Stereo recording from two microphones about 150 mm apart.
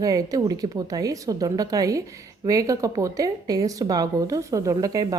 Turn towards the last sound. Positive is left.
turn(degrees=-25)  # may be behind; listen again after turning